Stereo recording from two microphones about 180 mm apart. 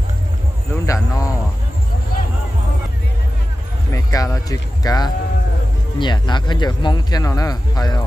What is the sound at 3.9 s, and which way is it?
Music, 20° left (ahead or behind).